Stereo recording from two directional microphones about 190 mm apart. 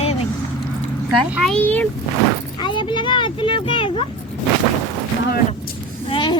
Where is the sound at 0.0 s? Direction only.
30° left (ahead or behind).